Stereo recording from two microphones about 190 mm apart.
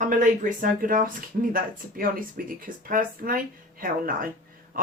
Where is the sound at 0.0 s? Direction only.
45° right (ahead or behind).